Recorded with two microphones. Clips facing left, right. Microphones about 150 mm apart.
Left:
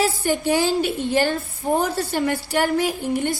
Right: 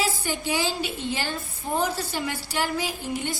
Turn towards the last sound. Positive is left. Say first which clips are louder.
# left 7 dB
turn(degrees=50)  # may be behind; listen again after turning